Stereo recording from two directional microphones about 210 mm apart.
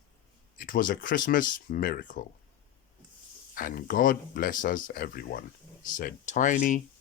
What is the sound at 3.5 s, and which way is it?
Speech, 40° left (ahead or behind).